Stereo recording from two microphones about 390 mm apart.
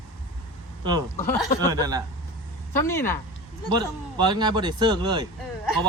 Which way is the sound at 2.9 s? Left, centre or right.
Centre.